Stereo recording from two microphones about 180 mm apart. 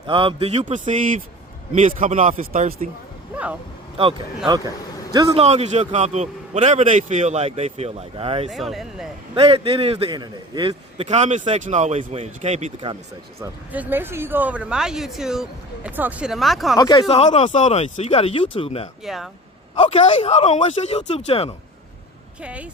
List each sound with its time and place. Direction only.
0.1 s a man's voice: 30° right (ahead or behind); by 2.6 s 50° right (ahead or behind)
3.3 s speech: 5° right (ahead or behind)
4.4 s speech: 20° right (ahead or behind)
5.3 s a man's voice: 35° right (ahead or behind)
8.4 s speech: centre (ahead or behind)
9.3 s a man's voice: 30° right (ahead or behind)
13.4 s speech: 10° right (ahead or behind)
16.7 s speech: 20° left (ahead or behind)
17.1 s speech: 35° left (ahead or behind)
19.0 s speech: centre (ahead or behind)
19.8 s speech: 30° left (ahead or behind)
22.4 s speech: 5° right (ahead or behind)